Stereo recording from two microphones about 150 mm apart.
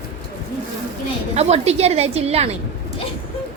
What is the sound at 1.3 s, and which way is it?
A woman's voice, 45° right (ahead or behind).